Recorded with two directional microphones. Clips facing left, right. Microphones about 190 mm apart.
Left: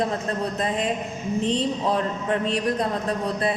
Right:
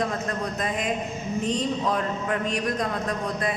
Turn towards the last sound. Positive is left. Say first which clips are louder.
# left 3 dB
turn(degrees=30)  # may be behind; listen again after turning